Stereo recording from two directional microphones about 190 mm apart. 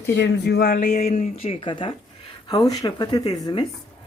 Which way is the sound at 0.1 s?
65° left (ahead or behind).